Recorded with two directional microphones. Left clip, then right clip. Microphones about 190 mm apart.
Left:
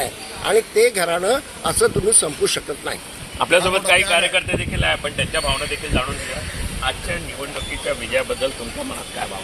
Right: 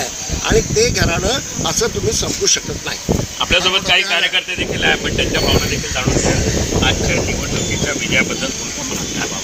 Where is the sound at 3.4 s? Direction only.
45° left (ahead or behind).